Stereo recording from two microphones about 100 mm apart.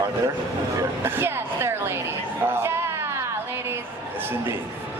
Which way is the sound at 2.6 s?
25° right (ahead or behind).